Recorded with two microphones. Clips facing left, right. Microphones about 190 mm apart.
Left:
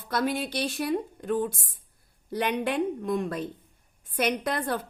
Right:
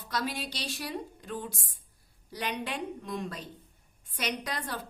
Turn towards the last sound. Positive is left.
turn(degrees=55)  # may be behind; listen again after turning